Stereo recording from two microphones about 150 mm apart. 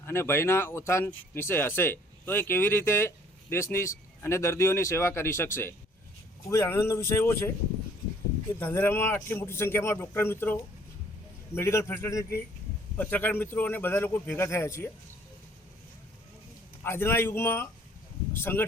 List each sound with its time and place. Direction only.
0.0 s speech: 15° left (ahead or behind)
8.5 s speech: 15° left (ahead or behind)
16.8 s speech: 15° left (ahead or behind)